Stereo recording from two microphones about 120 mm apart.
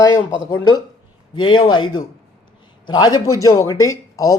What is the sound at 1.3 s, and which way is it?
Speech, 40° left (ahead or behind).